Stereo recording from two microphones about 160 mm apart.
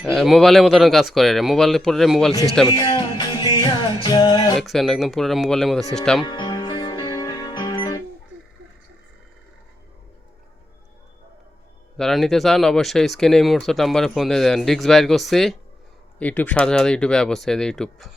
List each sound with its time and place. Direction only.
0.0 s speech: centre (ahead or behind)
2.6 s music: 30° left (ahead or behind)
4.5 s speech: centre (ahead or behind)
6.2 s music: 30° left (ahead or behind)
11.9 s speech: centre (ahead or behind)